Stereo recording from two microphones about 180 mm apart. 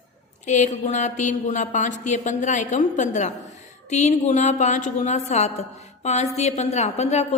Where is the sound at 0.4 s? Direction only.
40° left (ahead or behind).